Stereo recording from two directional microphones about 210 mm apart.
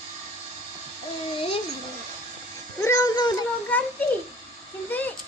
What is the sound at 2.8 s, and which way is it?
Music, 15° left (ahead or behind).